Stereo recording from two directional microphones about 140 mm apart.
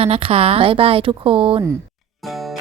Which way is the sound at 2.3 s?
Centre (ahead or behind).